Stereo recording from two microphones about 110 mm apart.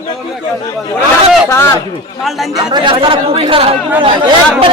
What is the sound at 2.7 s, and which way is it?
Speech, 50° right (ahead or behind).